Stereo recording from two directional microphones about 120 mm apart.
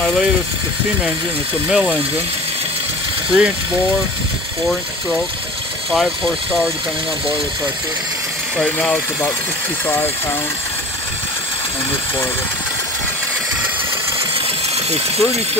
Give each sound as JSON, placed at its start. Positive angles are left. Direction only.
{"t": 1.7, "sound": "speech", "side_deg": -10}
{"t": 3.3, "sound": "speech", "side_deg": -10}
{"t": 5.9, "sound": "speech", "side_deg": 0}
{"t": 8.6, "sound": "speech", "side_deg": 10}
{"t": 14.9, "sound": "speech", "side_deg": -60}